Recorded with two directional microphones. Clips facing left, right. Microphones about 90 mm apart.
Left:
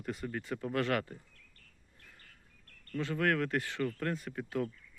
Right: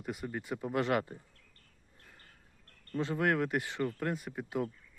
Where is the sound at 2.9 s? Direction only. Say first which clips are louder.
Right 1 dB; 25° right (ahead or behind).